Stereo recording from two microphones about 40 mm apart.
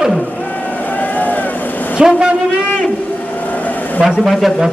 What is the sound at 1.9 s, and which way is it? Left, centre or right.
Speech, right.